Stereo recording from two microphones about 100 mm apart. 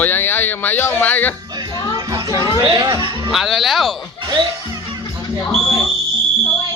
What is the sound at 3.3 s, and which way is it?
Speech, centre (ahead or behind).